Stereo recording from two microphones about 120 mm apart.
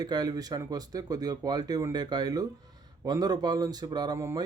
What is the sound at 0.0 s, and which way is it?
Speech, 35° right (ahead or behind).